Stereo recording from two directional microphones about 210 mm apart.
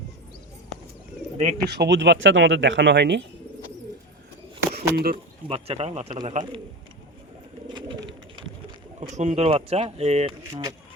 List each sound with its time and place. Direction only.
1.6 s speech: 50° right (ahead or behind)
4.7 s a sound: 45° right (ahead or behind)
5.1 s speech: 30° right (ahead or behind)
7.7 s bird: 20° right (ahead or behind)
9.0 s speech: 35° right (ahead or behind)
10.5 s speech: 20° right (ahead or behind)